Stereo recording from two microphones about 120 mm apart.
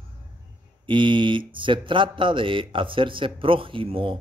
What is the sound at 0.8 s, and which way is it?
Speech, 45° right (ahead or behind).